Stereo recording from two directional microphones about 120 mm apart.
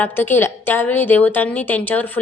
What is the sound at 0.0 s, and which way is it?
A woman's voice, 20° left (ahead or behind).